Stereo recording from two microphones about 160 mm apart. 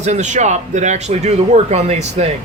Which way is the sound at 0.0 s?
45° right (ahead or behind).